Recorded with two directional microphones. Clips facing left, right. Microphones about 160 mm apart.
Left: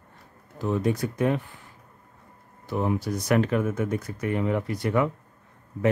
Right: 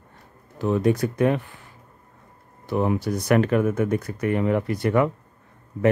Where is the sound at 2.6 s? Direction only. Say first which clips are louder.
Right 4 dB; 70° right (ahead or behind).